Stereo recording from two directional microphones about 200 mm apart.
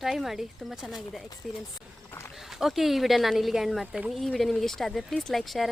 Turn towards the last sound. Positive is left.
turn(degrees=0)  # may be behind; listen again after turning